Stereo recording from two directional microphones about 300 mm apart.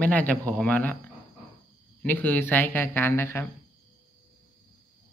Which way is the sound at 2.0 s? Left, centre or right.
Centre.